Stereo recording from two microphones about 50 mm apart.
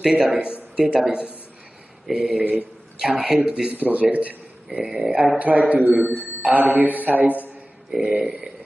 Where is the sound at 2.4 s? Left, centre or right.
Right.